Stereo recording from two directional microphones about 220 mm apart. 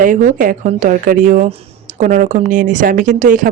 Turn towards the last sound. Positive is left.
turn(degrees=-35)  # may be behind; listen again after turning